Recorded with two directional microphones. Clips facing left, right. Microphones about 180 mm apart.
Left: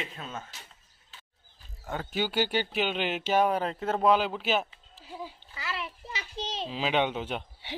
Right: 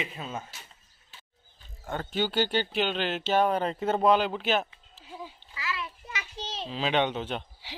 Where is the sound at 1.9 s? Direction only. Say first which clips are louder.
Right 1 dB; 5° left (ahead or behind).